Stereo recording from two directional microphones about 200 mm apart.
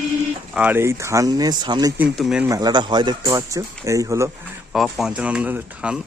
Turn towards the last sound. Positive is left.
turn(degrees=-5)  # may be behind; listen again after turning